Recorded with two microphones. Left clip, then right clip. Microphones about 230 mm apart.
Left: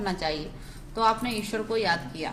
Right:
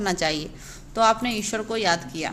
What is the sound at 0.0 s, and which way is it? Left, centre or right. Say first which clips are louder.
Speech: right 5 dB; right.